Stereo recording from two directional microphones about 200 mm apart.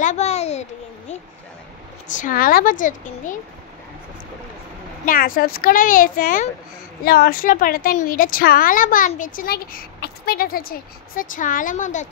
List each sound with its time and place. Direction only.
0.0 s a sound: 35° left (ahead or behind)
2.0 s a woman's voice: 40° left (ahead or behind)
5.0 s a woman's voice: 45° left (ahead or behind)